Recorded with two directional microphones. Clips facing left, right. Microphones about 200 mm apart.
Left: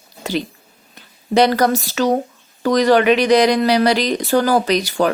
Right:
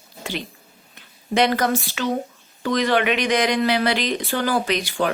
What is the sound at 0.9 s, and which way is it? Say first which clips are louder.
Speech: left 6 dB; 35° left (ahead or behind).